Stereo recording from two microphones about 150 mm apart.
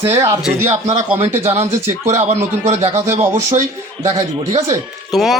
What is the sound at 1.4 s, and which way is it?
A man's voice, 45° right (ahead or behind).